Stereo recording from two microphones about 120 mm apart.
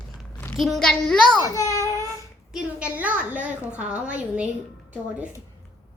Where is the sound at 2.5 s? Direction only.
10° right (ahead or behind).